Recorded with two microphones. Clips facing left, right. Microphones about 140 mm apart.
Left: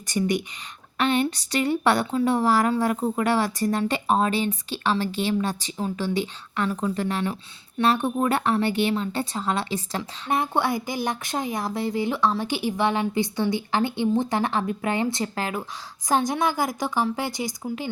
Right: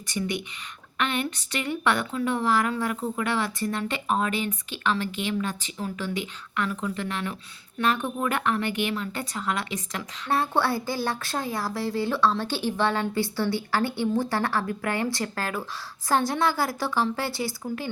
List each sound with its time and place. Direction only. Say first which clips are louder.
0.1 s speech: left 5 dB; 40° left (ahead or behind)
10.2 s speech: even; 15° left (ahead or behind)